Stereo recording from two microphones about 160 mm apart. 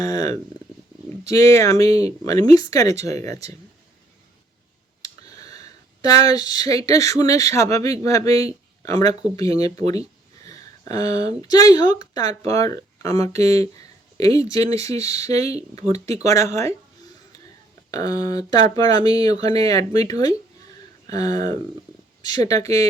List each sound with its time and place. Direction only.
0.0 s speech: 20° left (ahead or behind)
1.9 s speech: 40° right (ahead or behind)
2.2 s speech: 20° left (ahead or behind)
5.0 s speech: 25° left (ahead or behind)
14.8 s speech: 45° right (ahead or behind)
15.3 s speech: 20° left (ahead or behind)
17.9 s speech: 25° left (ahead or behind)